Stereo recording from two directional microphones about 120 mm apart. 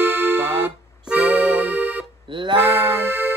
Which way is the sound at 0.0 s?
15° right (ahead or behind).